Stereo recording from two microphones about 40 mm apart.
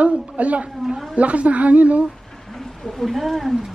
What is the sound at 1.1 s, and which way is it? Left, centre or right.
Speech, right.